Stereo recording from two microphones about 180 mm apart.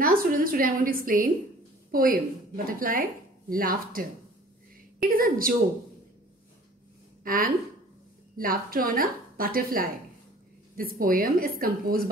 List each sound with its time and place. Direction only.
0.0 s a woman's voice: 50° right (ahead or behind)
5.0 s a woman's voice: 55° right (ahead or behind)
7.2 s a woman's voice: 50° right (ahead or behind)